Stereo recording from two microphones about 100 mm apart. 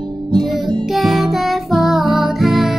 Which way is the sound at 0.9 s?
Centre (ahead or behind).